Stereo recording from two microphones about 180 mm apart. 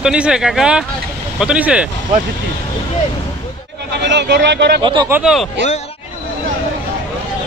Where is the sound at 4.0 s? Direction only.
75° right (ahead or behind).